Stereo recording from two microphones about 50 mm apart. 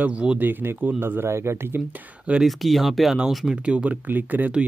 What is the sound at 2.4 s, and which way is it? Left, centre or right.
Speech, centre.